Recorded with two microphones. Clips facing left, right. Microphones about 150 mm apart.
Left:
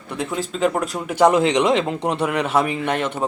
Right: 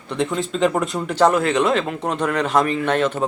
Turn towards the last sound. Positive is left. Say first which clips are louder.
# right 3 dB
turn(degrees=10)  # may be behind; listen again after turning